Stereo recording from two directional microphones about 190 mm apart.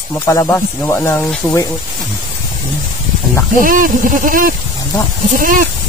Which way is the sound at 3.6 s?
45° right (ahead or behind).